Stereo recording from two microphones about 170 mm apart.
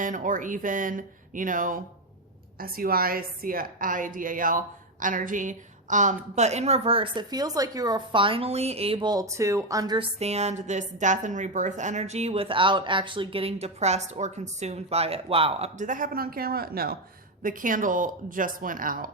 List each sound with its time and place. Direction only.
0.0 s a woman's voice: 50° right (ahead or behind); by 10.1 s 25° right (ahead or behind)
10.2 s a woman's voice: 40° right (ahead or behind); by 19.1 s 55° right (ahead or behind)